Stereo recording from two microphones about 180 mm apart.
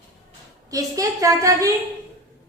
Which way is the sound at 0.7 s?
20° right (ahead or behind).